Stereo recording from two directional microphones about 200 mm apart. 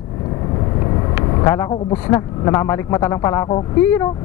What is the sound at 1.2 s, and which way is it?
Speech, 15° left (ahead or behind).